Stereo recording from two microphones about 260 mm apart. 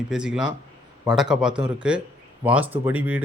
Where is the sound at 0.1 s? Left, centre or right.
Centre.